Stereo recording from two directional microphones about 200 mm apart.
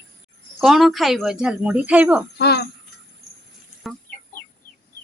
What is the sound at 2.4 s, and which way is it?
Speech, 55° left (ahead or behind).